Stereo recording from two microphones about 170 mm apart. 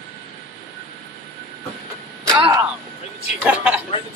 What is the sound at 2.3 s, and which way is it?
Speech, 20° right (ahead or behind).